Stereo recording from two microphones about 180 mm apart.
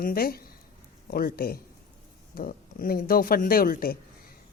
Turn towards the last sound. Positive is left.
turn(degrees=55)  # may be behind; listen again after turning